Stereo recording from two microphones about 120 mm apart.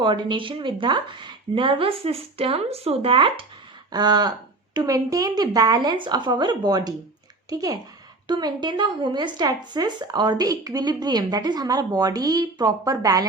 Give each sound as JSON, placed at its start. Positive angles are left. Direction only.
{"t": 0.0, "sound": "speech", "side_deg": -40}
{"t": 3.9, "sound": "speech", "side_deg": -35}